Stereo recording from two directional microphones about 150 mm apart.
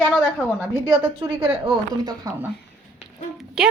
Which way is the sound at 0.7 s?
30° right (ahead or behind).